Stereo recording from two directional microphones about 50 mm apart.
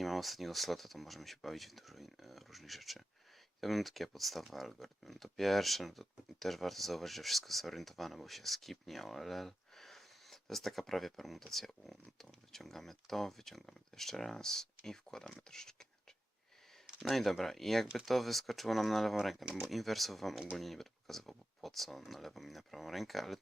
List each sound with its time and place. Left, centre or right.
0.0 s speech: centre
17.0 s speech: centre